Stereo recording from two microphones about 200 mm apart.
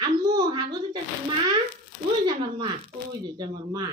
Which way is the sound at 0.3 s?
20° right (ahead or behind).